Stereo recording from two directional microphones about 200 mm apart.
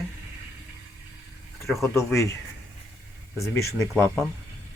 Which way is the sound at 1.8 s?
15° left (ahead or behind).